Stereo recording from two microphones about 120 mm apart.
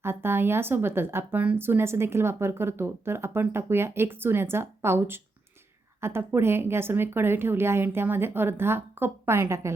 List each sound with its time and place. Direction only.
0.0 s speech: 20° right (ahead or behind)